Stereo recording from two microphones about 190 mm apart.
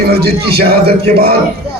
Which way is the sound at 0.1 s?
55° right (ahead or behind).